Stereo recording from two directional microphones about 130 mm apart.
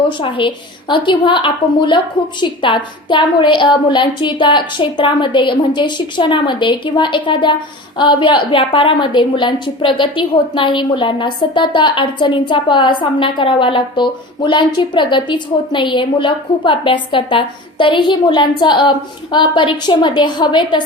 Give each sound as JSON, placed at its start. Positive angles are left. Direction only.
{"t": 0.2, "sound": "a woman's voice", "side_deg": 40}